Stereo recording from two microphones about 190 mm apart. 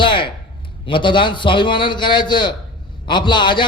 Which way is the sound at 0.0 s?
25° left (ahead or behind).